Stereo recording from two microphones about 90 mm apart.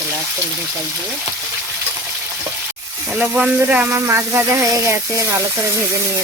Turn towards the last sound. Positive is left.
turn(degrees=-30)  # may be behind; listen again after turning